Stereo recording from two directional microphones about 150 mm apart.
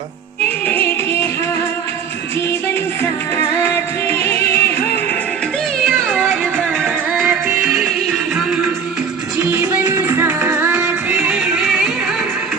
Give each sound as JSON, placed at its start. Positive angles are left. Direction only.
{"t": 0.4, "sound": "music", "side_deg": 10}
{"t": 3.6, "sound": "music", "side_deg": 15}
{"t": 5.8, "sound": "music", "side_deg": 0}
{"t": 6.8, "sound": "music", "side_deg": -10}
{"t": 9.5, "sound": "music", "side_deg": -15}